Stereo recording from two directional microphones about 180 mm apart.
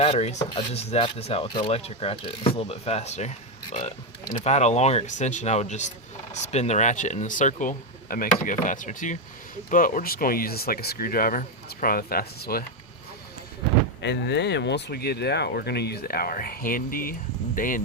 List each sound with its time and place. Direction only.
0.0 s rub: 35° left (ahead or behind)
6.3 s speech: 40° left (ahead or behind); by 12.6 s 55° left (ahead or behind)
14.0 s speech: 70° left (ahead or behind); by 17.8 s 50° left (ahead or behind)